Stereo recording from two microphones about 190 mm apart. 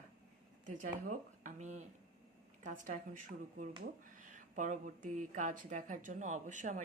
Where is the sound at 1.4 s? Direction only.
40° right (ahead or behind).